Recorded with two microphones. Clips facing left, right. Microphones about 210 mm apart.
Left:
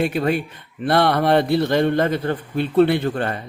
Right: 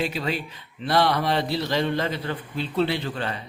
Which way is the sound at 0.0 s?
55° left (ahead or behind).